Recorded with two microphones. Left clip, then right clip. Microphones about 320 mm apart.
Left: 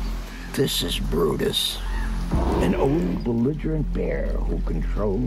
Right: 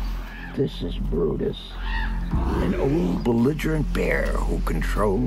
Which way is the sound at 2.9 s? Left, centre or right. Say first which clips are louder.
Right 1 dB; centre.